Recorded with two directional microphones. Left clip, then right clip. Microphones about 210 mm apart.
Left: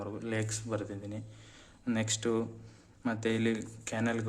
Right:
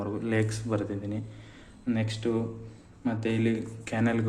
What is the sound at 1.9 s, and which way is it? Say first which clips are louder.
Speech: right 2 dB; 25° left (ahead or behind).